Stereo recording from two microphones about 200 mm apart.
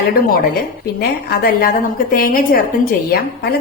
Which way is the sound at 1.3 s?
50° left (ahead or behind).